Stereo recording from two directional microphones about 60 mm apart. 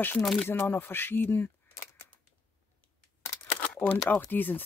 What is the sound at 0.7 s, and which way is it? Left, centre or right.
Speech, left.